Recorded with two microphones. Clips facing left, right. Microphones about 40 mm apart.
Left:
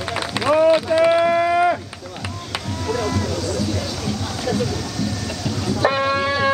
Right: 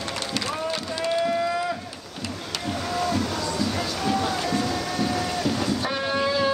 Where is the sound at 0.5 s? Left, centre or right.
Left.